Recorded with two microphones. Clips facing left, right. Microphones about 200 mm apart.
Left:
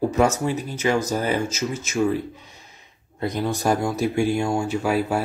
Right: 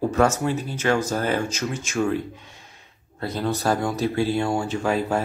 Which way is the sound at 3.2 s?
15° left (ahead or behind).